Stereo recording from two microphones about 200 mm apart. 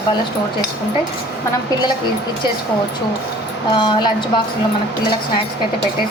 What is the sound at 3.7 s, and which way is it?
Speech, 25° left (ahead or behind).